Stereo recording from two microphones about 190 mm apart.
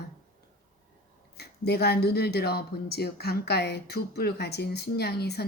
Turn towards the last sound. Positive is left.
turn(degrees=60)  # may be behind; listen again after turning